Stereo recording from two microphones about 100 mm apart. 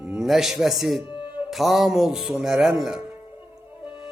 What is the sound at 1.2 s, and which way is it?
Music, 55° left (ahead or behind).